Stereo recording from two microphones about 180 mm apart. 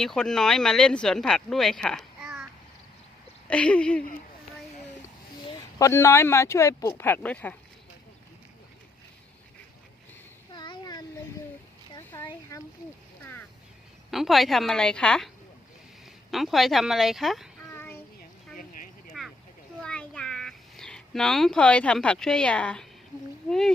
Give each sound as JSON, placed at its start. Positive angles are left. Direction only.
{"t": 0.0, "sound": "speech", "side_deg": 5}
{"t": 5.5, "sound": "speech", "side_deg": 15}
{"t": 10.5, "sound": "a sound", "side_deg": 25}
{"t": 14.1, "sound": "speech", "side_deg": 0}
{"t": 16.3, "sound": "speech", "side_deg": 0}
{"t": 17.7, "sound": "child singing", "side_deg": 10}
{"t": 19.2, "sound": "a sound", "side_deg": 0}
{"t": 23.5, "sound": "speech", "side_deg": 5}